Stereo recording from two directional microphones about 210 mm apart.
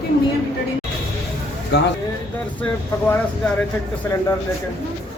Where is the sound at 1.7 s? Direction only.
55° left (ahead or behind).